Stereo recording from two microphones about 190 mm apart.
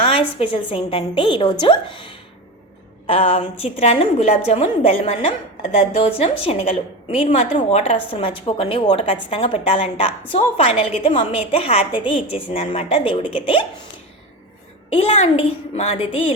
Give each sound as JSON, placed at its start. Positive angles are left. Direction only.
{"t": 0.0, "sound": "a woman's voice", "side_deg": 30}
{"t": 14.8, "sound": "a woman's voice", "side_deg": 30}